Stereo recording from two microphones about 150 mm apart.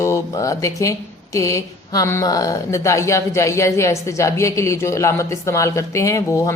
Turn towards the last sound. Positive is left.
turn(degrees=20)  # may be behind; listen again after turning